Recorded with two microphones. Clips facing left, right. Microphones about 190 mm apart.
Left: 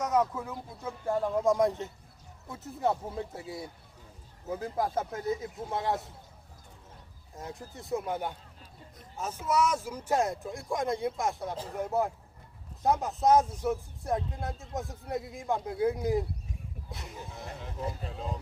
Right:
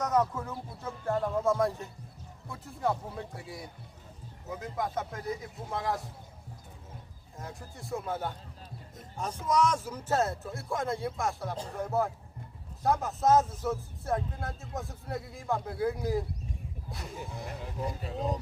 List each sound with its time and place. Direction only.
0.0 s a man's voice: 10° left (ahead or behind); by 6.0 s 25° left (ahead or behind)
7.3 s a man's voice: 20° left (ahead or behind)
17.3 s speech: centre (ahead or behind)